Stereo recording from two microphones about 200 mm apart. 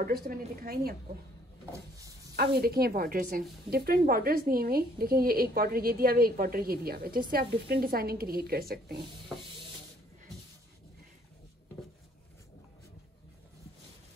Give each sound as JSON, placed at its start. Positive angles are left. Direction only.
{"t": 0.0, "sound": "a woman's voice", "side_deg": -45}
{"t": 1.7, "sound": "a sound", "side_deg": -15}
{"t": 2.3, "sound": "a woman's voice", "side_deg": -50}